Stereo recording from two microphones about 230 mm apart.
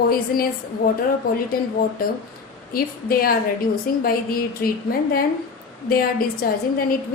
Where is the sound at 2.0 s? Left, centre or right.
Left.